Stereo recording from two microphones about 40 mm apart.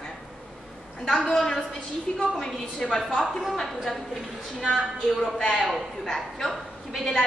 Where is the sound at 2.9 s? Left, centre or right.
Centre.